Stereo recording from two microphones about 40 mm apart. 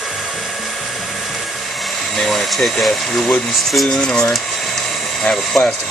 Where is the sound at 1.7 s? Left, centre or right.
Centre.